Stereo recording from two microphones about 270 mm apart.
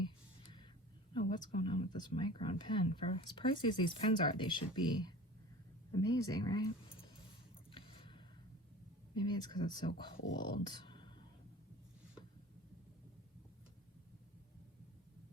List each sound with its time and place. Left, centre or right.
1.1 s a woman's voice: centre
7.7 s a sound: centre
9.1 s a woman's voice: centre